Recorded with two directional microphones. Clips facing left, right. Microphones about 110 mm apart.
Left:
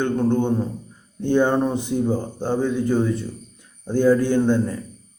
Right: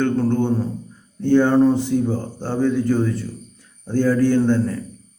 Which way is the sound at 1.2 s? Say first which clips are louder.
Right 4 dB; 15° left (ahead or behind).